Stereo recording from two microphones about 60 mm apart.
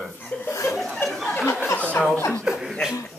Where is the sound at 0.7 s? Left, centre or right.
Centre.